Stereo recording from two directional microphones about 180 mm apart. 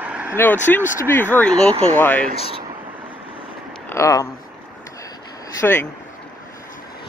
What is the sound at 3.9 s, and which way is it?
Speech, 15° left (ahead or behind).